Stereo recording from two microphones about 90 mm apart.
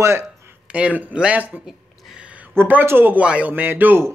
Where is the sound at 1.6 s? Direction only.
10° right (ahead or behind).